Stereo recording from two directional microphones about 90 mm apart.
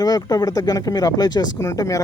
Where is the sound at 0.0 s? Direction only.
45° left (ahead or behind).